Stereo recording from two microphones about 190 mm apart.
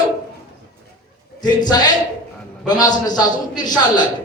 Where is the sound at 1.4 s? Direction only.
20° left (ahead or behind).